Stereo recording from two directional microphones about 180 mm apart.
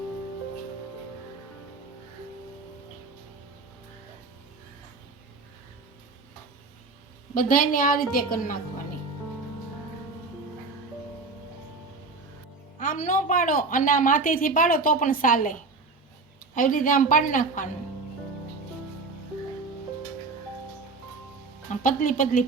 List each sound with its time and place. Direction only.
7.3 s a woman's voice: 50° left (ahead or behind)
12.8 s a woman's voice: 45° left (ahead or behind)
16.6 s a woman's voice: 50° left (ahead or behind)
21.7 s speech: 50° left (ahead or behind)